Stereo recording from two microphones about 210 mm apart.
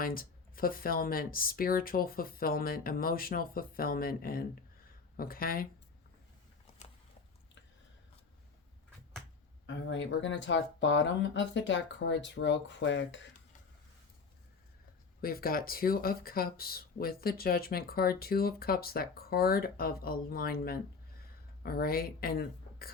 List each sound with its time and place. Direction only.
0.0 s speech: 45° left (ahead or behind)
6.8 s a sound: 30° left (ahead or behind)
9.6 s speech: 60° left (ahead or behind)
15.2 s speech: 45° left (ahead or behind)